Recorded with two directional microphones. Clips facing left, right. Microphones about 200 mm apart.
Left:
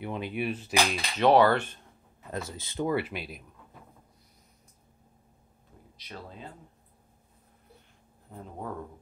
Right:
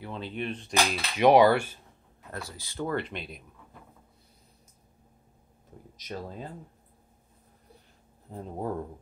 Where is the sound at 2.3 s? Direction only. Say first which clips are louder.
Left 4 dB; 20° left (ahead or behind).